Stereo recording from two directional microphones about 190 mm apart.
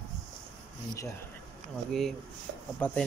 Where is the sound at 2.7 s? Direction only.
10° left (ahead or behind).